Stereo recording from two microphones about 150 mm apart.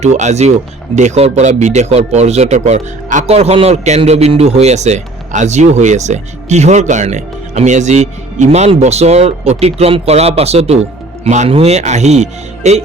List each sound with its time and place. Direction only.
0.0 s speech: 50° right (ahead or behind)